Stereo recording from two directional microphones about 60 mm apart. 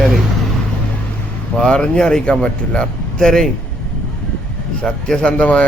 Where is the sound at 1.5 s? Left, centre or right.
Centre.